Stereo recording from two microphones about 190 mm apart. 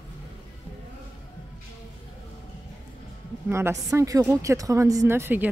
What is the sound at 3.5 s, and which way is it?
Speech, 15° right (ahead or behind).